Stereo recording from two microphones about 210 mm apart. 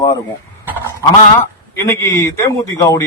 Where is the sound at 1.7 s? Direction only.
15° left (ahead or behind).